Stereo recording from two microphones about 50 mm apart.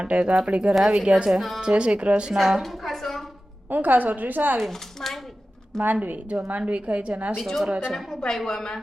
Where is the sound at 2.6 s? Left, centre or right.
Centre.